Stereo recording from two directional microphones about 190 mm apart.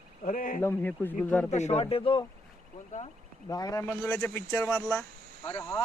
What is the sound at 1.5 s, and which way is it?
Speech, 35° left (ahead or behind).